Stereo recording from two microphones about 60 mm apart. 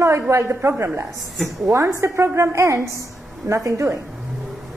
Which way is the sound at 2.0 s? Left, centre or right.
Right.